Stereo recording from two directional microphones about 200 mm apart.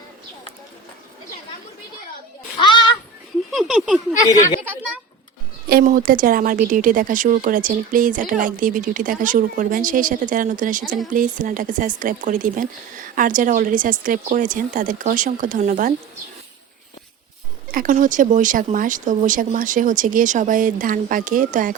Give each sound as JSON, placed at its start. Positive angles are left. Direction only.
{"t": 2.6, "sound": "children playing", "side_deg": 25}
{"t": 3.5, "sound": "a sound", "side_deg": 0}
{"t": 5.6, "sound": "a woman's voice", "side_deg": -45}
{"t": 17.7, "sound": "a woman's voice", "side_deg": -45}